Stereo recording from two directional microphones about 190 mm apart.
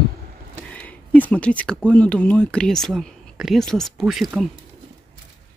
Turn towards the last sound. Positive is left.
turn(degrees=0)  # may be behind; listen again after turning